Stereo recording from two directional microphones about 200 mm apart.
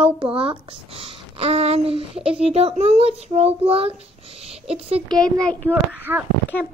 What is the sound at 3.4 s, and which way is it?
Child singing, 30° right (ahead or behind).